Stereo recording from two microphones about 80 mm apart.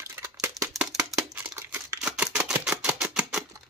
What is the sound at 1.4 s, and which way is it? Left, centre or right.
Crumpling, right.